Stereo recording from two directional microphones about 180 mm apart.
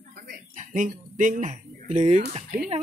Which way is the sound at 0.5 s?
45° right (ahead or behind).